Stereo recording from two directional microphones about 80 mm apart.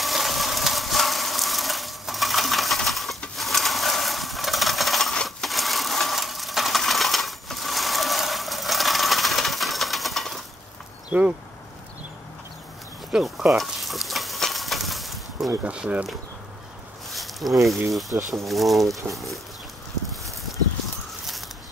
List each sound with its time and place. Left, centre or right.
0.0 s vehicle: centre
3.3 s a sound: centre
11.1 s speech: centre
13.1 s frying: centre
15.6 s speech: centre
17.1 s a sound: centre
18.1 s speech: right
18.5 s speech: centre